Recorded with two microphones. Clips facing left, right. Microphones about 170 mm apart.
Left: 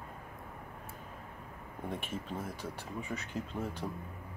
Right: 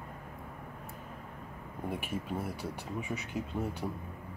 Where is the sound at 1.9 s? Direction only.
10° right (ahead or behind).